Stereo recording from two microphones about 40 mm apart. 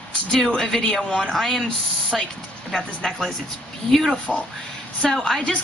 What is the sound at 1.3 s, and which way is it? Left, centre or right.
Speech, centre.